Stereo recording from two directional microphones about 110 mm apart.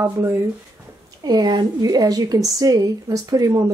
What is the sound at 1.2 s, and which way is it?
A woman's voice, 40° right (ahead or behind).